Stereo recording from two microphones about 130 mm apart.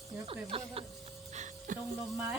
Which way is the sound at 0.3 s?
45° right (ahead or behind).